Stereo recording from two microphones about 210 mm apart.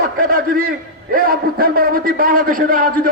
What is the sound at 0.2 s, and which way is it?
A man's voice, 40° right (ahead or behind).